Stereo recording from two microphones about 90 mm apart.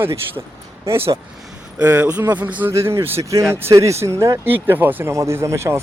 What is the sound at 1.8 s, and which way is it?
Speech, 20° right (ahead or behind).